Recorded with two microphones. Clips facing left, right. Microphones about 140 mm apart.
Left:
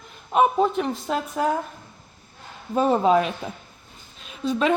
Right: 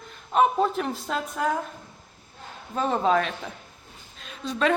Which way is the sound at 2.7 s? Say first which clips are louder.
Left 4 dB; 10° left (ahead or behind).